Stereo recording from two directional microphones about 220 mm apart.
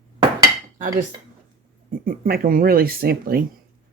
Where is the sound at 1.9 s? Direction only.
40° right (ahead or behind).